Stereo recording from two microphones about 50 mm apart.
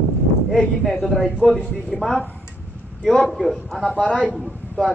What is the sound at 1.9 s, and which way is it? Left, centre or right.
Speech, centre.